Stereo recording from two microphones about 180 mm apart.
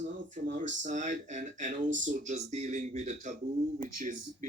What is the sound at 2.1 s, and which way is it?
Speech, 40° right (ahead or behind).